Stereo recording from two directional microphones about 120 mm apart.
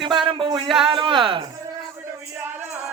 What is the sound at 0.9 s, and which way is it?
Speech, 40° right (ahead or behind).